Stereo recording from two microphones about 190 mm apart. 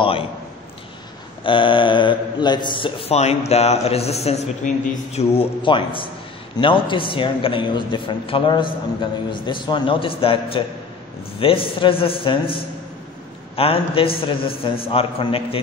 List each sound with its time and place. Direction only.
0.0 s a man's voice: 30° left (ahead or behind)
1.4 s a man's voice: 25° left (ahead or behind)